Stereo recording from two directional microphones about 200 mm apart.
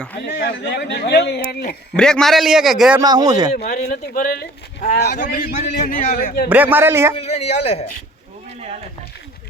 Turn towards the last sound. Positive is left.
turn(degrees=30)  # may be behind; listen again after turning